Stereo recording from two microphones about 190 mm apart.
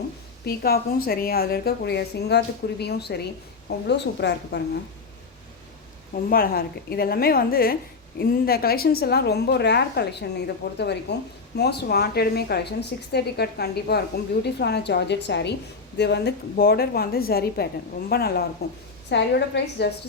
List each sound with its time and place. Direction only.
0.4 s a woman's voice: 55° left (ahead or behind)
6.3 s a woman's voice: 50° left (ahead or behind)